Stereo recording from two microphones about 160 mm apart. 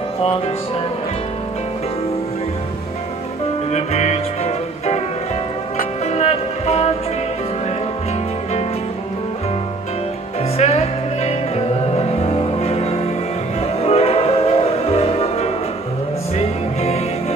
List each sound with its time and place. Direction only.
3.7 s music: 40° left (ahead or behind)
6.1 s music: 40° left (ahead or behind)
10.6 s music: 40° left (ahead or behind)